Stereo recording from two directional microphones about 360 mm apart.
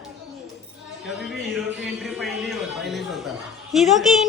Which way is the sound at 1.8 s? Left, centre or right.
Centre.